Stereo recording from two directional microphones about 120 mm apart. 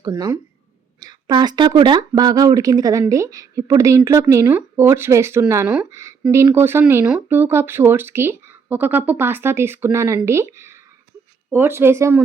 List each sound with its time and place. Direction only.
0.0 s speech: 30° right (ahead or behind)
5.6 s speech: 10° right (ahead or behind)
5.9 s speech: 25° right (ahead or behind)